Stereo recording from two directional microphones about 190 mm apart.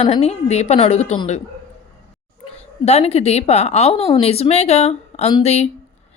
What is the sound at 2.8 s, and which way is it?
A woman's voice, 35° left (ahead or behind).